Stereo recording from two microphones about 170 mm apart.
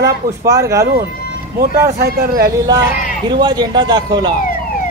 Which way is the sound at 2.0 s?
65° right (ahead or behind).